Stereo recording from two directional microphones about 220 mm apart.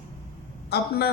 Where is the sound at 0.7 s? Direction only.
45° left (ahead or behind).